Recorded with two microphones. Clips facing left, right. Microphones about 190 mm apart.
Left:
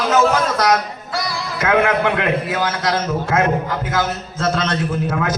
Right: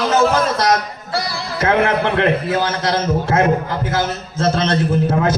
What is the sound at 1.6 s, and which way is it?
A man's voice, 30° right (ahead or behind).